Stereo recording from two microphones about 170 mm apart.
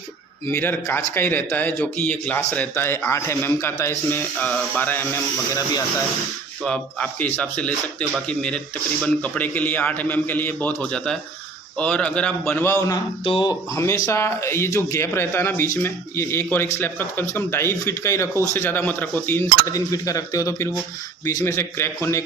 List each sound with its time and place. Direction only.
0.4 s speech: 15° left (ahead or behind)
6.6 s speech: 5° left (ahead or behind)
13.2 s speech: 30° left (ahead or behind)
13.7 s speech: 15° left (ahead or behind)